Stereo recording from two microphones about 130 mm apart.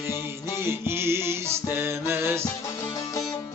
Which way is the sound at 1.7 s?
15° right (ahead or behind).